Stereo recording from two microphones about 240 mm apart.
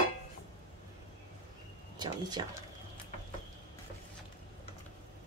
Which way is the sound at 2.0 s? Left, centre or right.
Centre.